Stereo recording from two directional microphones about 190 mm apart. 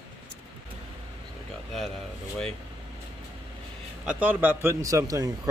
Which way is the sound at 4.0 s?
5° right (ahead or behind).